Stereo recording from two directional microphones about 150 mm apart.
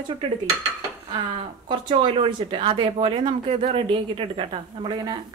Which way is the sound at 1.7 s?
30° right (ahead or behind).